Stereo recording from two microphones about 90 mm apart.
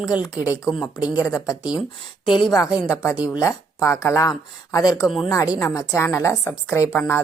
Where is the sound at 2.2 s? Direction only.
65° left (ahead or behind).